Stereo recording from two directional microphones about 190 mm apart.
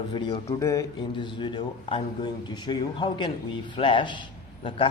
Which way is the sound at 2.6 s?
25° left (ahead or behind).